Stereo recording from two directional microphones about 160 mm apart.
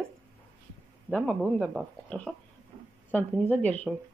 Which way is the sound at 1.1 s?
10° left (ahead or behind).